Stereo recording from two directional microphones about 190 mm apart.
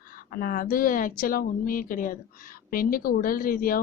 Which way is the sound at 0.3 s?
50° left (ahead or behind).